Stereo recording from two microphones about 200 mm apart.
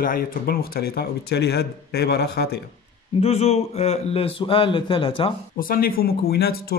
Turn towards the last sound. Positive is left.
turn(degrees=50)  # may be behind; listen again after turning